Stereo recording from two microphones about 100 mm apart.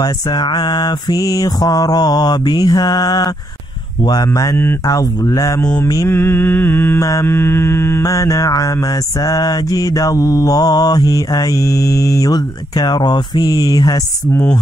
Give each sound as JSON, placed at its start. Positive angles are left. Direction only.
{"t": 0.0, "sound": "mantra", "side_deg": 45}
{"t": 6.0, "sound": "mantra", "side_deg": 25}
{"t": 7.0, "sound": "mantra", "side_deg": 30}
{"t": 8.0, "sound": "mantra", "side_deg": 35}